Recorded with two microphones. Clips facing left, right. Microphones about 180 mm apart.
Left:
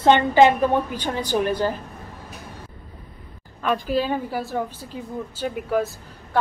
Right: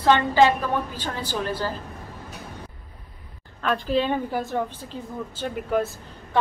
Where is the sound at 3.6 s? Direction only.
10° left (ahead or behind).